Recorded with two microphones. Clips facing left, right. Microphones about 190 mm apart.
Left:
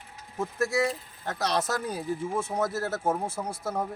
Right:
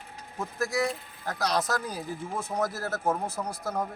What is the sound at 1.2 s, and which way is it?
Speech, 25° left (ahead or behind).